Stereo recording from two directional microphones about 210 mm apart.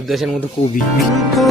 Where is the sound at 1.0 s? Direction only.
Centre (ahead or behind).